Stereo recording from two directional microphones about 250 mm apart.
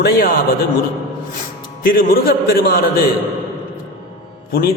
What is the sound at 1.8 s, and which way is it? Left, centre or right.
Music, left.